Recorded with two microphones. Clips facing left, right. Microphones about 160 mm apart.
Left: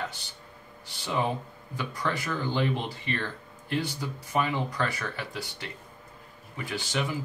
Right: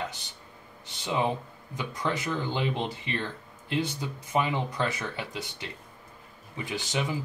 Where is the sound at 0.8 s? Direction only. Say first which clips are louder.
Right 1 dB; 20° right (ahead or behind).